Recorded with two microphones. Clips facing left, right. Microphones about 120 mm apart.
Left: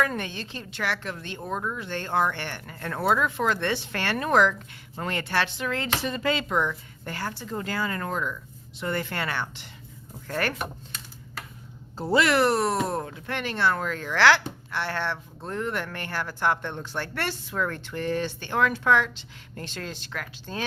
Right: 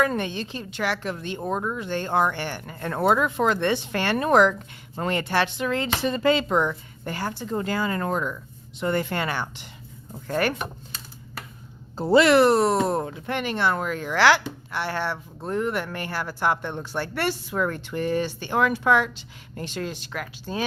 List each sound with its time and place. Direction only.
0.0 s speech: 25° right (ahead or behind)
6.1 s speech: 30° right (ahead or behind)
7.1 s speech: 15° right (ahead or behind)
11.9 s speech: 25° right (ahead or behind); by 20.7 s 10° right (ahead or behind)